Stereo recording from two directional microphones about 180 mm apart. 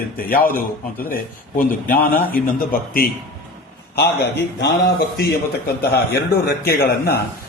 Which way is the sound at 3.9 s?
65° left (ahead or behind).